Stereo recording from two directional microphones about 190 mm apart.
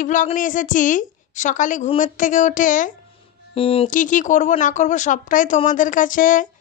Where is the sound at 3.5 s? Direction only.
30° left (ahead or behind).